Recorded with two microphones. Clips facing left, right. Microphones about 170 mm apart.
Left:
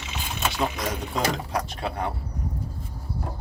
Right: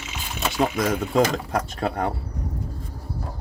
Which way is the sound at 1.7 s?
45° right (ahead or behind).